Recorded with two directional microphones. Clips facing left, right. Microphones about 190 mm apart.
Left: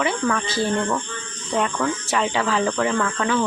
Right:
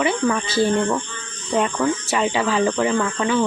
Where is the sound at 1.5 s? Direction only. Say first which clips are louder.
Right 3 dB; 10° right (ahead or behind).